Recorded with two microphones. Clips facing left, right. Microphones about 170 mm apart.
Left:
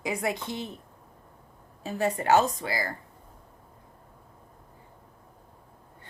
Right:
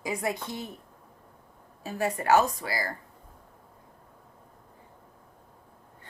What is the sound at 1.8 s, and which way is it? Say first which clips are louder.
A woman's voice: left 2 dB; 25° left (ahead or behind).